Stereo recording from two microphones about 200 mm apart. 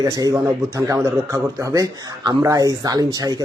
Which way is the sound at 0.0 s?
20° right (ahead or behind).